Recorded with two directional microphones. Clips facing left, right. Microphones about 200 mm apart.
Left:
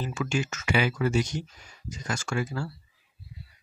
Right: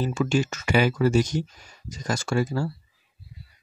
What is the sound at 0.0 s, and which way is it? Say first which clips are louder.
Speech: right 6 dB; 35° right (ahead or behind).